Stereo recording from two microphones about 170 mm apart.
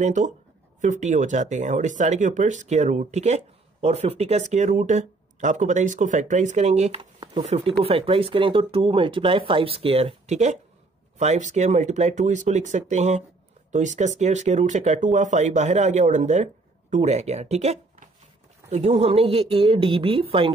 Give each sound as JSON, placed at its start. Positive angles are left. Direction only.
{"t": 0.0, "sound": "speech", "side_deg": -45}